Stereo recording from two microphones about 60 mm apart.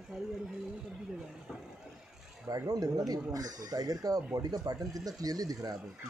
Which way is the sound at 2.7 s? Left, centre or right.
Right.